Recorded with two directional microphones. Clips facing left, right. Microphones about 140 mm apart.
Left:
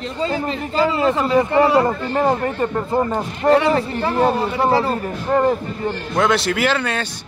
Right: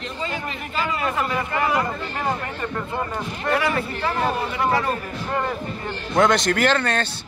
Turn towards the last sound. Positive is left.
turn(degrees=5)  # may be behind; listen again after turning